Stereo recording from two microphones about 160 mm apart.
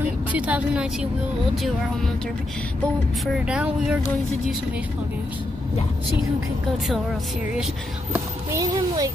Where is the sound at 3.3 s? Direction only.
5° right (ahead or behind).